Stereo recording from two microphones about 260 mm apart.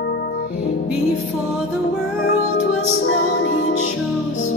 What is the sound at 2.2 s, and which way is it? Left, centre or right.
Music, left.